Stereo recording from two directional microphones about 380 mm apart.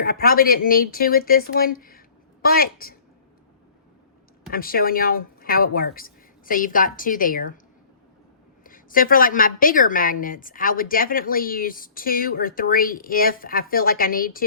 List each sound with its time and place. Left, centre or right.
0.0 s speech: left
4.5 s a woman's voice: left
8.6 s a woman's voice: left